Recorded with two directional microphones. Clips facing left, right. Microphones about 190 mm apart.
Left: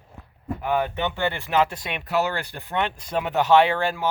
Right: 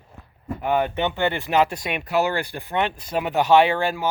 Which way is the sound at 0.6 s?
20° right (ahead or behind).